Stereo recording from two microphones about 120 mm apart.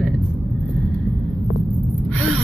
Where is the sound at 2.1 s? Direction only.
5° left (ahead or behind).